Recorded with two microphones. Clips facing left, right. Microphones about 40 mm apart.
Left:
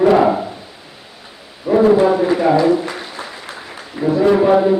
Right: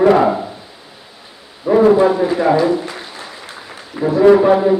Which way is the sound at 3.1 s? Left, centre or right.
Left.